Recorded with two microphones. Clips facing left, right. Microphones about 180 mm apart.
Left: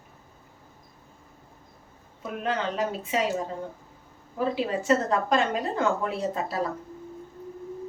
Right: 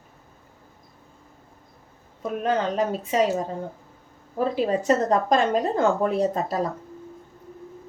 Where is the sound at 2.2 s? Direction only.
40° right (ahead or behind).